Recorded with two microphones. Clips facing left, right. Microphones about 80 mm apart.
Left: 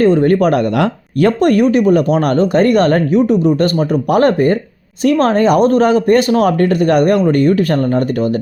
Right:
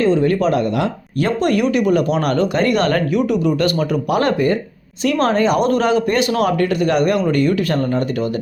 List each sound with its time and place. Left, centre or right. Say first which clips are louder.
0.0 s speech: left 5 dB; left